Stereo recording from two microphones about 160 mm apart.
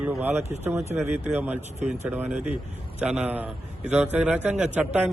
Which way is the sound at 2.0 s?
10° right (ahead or behind).